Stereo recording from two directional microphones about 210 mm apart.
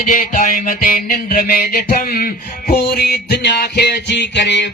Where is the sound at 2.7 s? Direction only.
50° left (ahead or behind).